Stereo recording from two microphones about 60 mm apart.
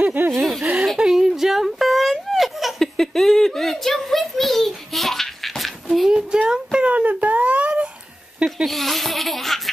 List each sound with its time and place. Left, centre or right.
0.0 s chuckle: right
0.3 s chuckle: centre
0.9 s a sound: centre
8.6 s laughter: centre